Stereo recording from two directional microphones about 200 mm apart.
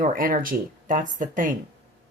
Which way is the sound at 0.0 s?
45° right (ahead or behind).